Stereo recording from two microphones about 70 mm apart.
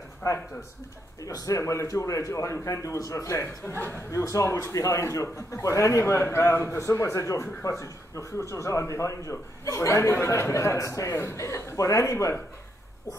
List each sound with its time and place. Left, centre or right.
0.2 s speech: left
1.2 s speech: left
1.6 s speech: left
4.5 s a man's voice: left
4.7 s a man's voice: left
6.9 s speech: left